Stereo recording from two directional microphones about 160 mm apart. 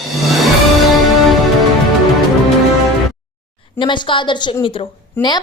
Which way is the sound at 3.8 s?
30° left (ahead or behind).